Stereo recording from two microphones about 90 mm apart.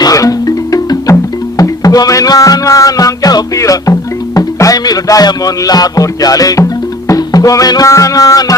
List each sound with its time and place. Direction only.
0.0 s music: 40° left (ahead or behind)